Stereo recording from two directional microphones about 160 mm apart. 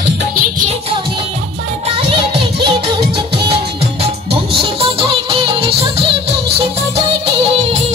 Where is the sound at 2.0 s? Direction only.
35° right (ahead or behind).